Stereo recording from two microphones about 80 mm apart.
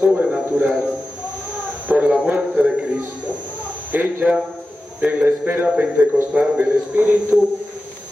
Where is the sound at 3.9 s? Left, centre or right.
Right.